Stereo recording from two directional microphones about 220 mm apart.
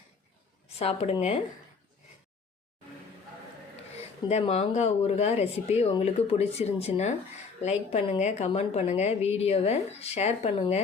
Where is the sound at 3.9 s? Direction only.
30° left (ahead or behind).